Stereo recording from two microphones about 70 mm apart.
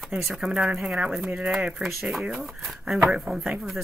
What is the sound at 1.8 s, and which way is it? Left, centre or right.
Speech, centre.